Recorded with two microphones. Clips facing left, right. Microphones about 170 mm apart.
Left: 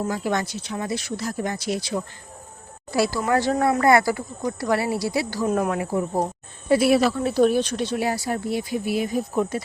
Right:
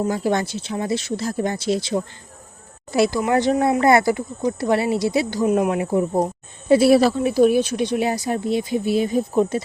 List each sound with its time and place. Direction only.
0.0 s speech: 30° right (ahead or behind)
7.2 s speech: 10° right (ahead or behind)